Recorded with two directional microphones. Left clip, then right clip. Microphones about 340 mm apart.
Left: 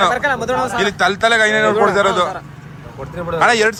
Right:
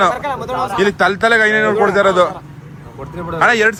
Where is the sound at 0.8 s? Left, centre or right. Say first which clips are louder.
Right 3 dB; centre.